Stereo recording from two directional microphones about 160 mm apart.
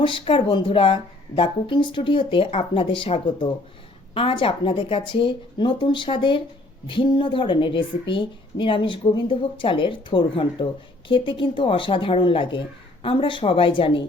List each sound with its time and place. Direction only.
0.0 s a woman's voice: 30° left (ahead or behind)